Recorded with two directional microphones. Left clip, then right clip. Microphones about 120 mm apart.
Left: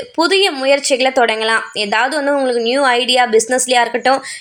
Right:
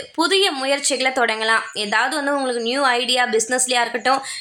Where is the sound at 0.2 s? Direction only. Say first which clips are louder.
Left 4 dB; 20° left (ahead or behind).